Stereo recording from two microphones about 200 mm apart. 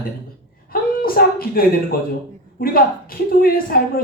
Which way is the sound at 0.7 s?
45° left (ahead or behind).